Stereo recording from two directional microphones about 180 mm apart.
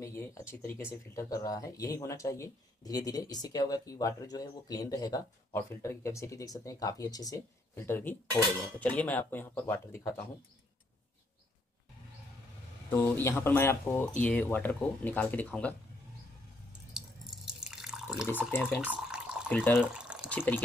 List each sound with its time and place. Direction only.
0.0 s speech: 15° left (ahead or behind)
12.9 s speech: 10° left (ahead or behind)
17.0 s drip: 5° right (ahead or behind)
17.5 s water: 5° right (ahead or behind)
18.5 s speech: 10° left (ahead or behind)
18.9 s drip: 5° right (ahead or behind)
19.5 s speech: 10° left (ahead or behind)
19.9 s water: 5° right (ahead or behind)
20.2 s speech: 10° left (ahead or behind)